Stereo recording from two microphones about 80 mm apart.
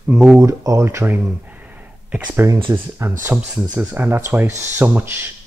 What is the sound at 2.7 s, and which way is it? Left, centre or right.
Speech, right.